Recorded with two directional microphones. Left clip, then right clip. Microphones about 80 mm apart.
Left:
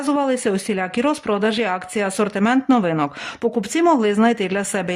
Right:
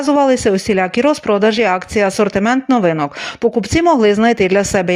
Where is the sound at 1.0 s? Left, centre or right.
Right.